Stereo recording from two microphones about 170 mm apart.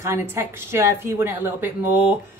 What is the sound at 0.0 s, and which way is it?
A woman's voice, 15° right (ahead or behind).